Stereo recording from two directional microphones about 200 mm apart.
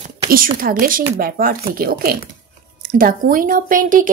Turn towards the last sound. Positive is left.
turn(degrees=-40)  # may be behind; listen again after turning